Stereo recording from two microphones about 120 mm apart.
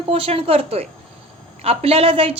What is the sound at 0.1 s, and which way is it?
A woman's voice, 55° right (ahead or behind).